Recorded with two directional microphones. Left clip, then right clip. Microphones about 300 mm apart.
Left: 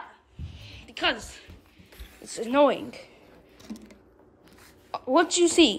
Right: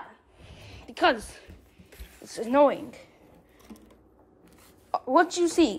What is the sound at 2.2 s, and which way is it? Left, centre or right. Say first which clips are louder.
Speech: even; centre.